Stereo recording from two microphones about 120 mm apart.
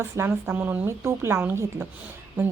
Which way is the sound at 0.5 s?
15° right (ahead or behind).